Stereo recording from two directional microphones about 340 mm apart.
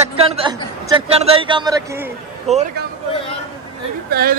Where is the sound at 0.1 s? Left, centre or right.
Centre.